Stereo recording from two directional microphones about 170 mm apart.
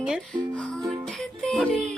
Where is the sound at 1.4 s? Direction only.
Centre (ahead or behind).